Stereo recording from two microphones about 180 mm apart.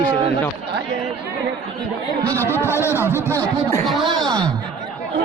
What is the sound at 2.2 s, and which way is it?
Speech, 10° left (ahead or behind).